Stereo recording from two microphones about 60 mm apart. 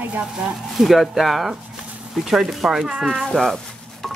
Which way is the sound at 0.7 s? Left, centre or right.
Centre.